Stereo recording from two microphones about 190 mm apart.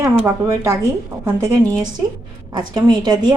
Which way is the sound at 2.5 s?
20° right (ahead or behind).